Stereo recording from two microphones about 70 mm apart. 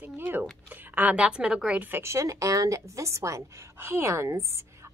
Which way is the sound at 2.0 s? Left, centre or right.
Right.